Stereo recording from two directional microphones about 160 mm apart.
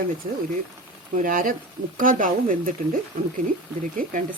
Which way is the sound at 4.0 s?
60° right (ahead or behind).